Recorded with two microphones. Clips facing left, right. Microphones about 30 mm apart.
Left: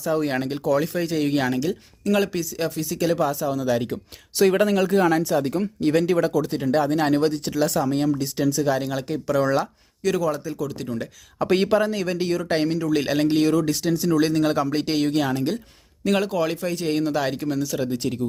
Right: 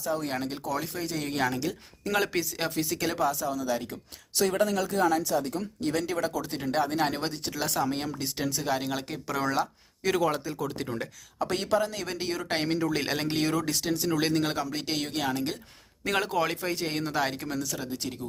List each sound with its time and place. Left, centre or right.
0.2 s speech: left
2.0 s speech: centre
2.3 s speech: centre
3.5 s speech: left
4.5 s speech: left
5.9 s speech: left
6.3 s speech: centre
10.2 s speech: right
10.4 s speech: right
11.5 s speech: left
11.9 s speech: centre
14.6 s speech: centre
17.7 s speech: centre